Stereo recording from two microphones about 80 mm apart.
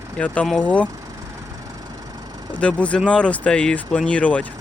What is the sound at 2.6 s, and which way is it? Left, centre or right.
Speech, centre.